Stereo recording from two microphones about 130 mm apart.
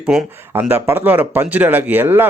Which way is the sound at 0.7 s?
15° right (ahead or behind).